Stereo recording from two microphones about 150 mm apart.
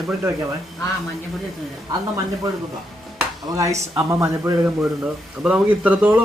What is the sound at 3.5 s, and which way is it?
Speech, 20° right (ahead or behind).